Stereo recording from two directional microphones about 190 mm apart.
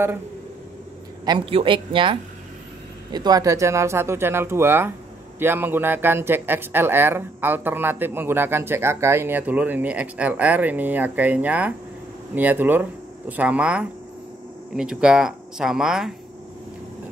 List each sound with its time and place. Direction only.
1.2 s speech: 25° right (ahead or behind); by 16.1 s 5° right (ahead or behind)